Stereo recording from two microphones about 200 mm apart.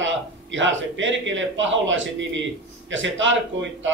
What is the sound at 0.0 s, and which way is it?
A man's voice, 70° right (ahead or behind).